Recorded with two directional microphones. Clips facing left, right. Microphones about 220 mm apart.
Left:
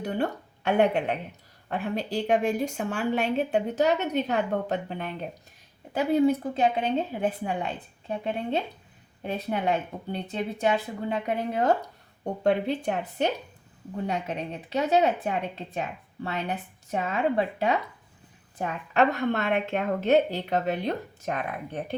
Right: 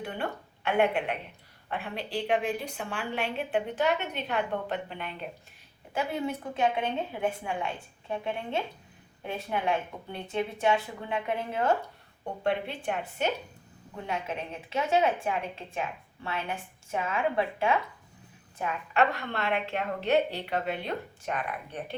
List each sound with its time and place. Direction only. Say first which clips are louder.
0.0 s a woman's voice: left 6 dB; 40° left (ahead or behind)
8.2 s a woman's voice: left 5 dB; 35° left (ahead or behind)